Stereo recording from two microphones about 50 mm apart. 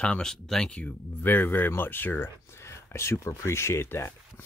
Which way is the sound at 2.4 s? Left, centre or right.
Left.